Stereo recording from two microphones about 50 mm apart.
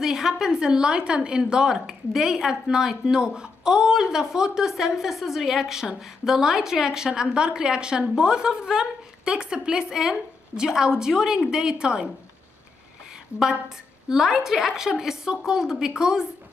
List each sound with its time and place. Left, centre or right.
0.0 s a woman's voice: centre
14.0 s a woman's voice: centre